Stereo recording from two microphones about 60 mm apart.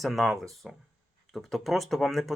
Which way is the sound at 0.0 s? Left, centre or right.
Centre.